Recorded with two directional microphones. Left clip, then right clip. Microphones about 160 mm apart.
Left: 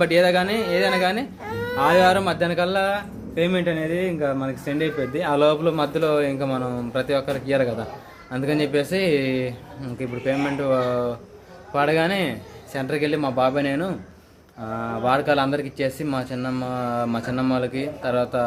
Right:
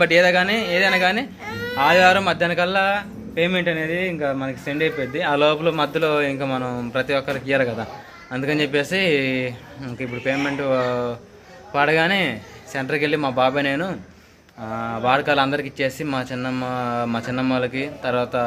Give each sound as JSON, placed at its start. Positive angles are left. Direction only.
{"t": 0.0, "sound": "speech", "side_deg": 0}
{"t": 1.5, "sound": "baby cry", "side_deg": 60}
{"t": 1.8, "sound": "speech", "side_deg": 5}